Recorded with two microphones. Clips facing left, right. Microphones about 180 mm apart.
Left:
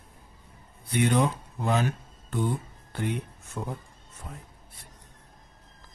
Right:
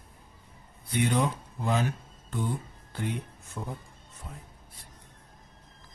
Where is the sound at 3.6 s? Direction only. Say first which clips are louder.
Left 3 dB; 70° left (ahead or behind).